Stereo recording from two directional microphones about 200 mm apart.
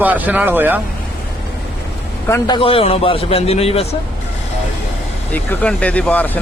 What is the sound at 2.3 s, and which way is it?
A man's voice, 25° left (ahead or behind).